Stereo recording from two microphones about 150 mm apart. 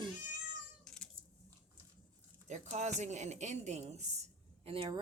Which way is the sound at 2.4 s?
50° right (ahead or behind).